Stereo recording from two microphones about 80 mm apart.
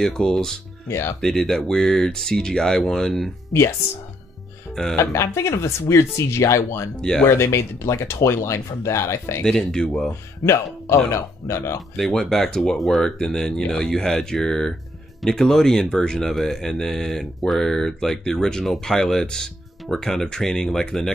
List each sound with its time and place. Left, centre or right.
0.0 s speech: centre
0.8 s speech: left
1.2 s speech: centre
4.9 s speech: left
7.0 s speech: centre
7.2 s speech: left
9.4 s speech: centre
10.4 s speech: left
12.0 s speech: centre